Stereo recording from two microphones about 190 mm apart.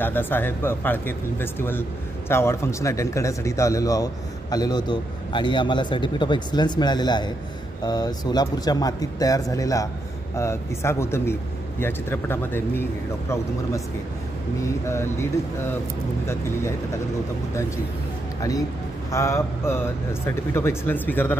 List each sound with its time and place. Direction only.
0.0 s speech: 10° left (ahead or behind)
14.6 s speech: 15° left (ahead or behind)
19.1 s speech: 15° left (ahead or behind)